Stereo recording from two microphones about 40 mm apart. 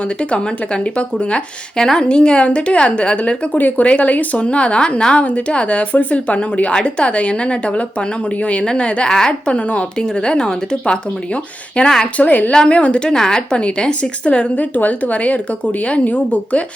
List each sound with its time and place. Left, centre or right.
0.3 s a woman's voice: left
3.6 s a woman's voice: left
12.1 s a woman's voice: left
12.6 s a woman's voice: left
13.1 s speech: centre
13.5 s a woman's voice: left